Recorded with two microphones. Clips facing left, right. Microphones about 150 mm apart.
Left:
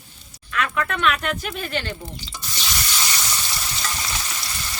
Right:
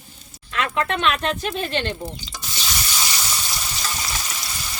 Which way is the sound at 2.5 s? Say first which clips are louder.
Even; 5° right (ahead or behind).